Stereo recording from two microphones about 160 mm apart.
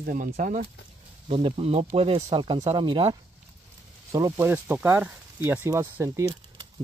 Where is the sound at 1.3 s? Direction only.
40° right (ahead or behind).